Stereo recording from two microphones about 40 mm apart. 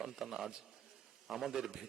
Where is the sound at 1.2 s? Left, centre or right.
Centre.